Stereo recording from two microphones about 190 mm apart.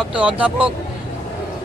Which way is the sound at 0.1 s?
5° right (ahead or behind).